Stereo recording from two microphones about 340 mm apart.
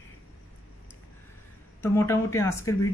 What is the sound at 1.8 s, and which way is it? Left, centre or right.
Speech, centre.